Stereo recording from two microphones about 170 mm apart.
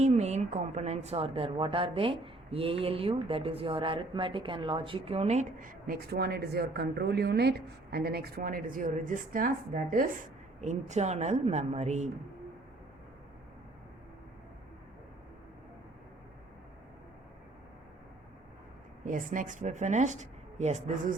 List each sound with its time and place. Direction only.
0.0 s a woman's voice: 40° right (ahead or behind)
10.6 s speech: 45° right (ahead or behind)
19.0 s speech: 50° right (ahead or behind)